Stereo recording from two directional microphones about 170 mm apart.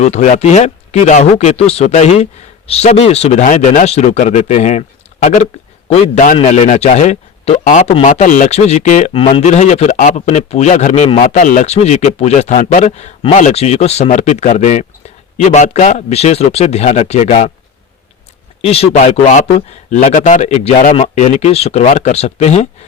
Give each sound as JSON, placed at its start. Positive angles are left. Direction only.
{"t": 0.0, "sound": "a man's voice", "side_deg": 40}
{"t": 18.6, "sound": "speech", "side_deg": 35}